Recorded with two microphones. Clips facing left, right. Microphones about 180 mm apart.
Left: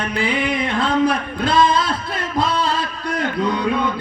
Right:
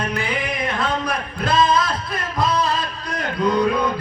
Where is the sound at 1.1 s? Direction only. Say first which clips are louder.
Left 3 dB; 25° left (ahead or behind).